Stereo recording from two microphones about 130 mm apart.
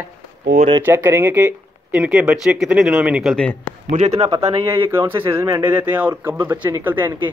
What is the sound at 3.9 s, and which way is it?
Speech, 60° right (ahead or behind).